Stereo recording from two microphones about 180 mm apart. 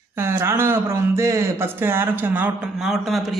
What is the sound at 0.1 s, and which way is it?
Speech, 15° right (ahead or behind).